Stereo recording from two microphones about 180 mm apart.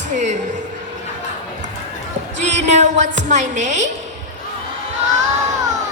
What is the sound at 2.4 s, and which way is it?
Music, 40° right (ahead or behind).